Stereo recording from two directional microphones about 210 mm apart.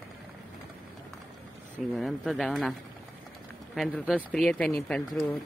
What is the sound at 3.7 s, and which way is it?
Speech, centre (ahead or behind).